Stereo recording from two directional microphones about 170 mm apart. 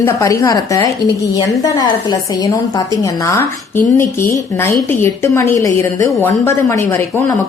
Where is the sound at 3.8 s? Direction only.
50° left (ahead or behind).